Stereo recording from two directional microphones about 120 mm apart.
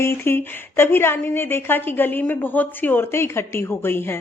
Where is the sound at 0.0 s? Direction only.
20° left (ahead or behind).